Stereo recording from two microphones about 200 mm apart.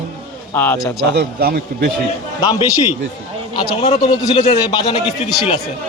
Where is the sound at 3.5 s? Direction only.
25° left (ahead or behind).